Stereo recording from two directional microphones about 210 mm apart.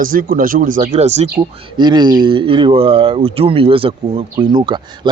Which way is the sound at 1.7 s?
20° right (ahead or behind).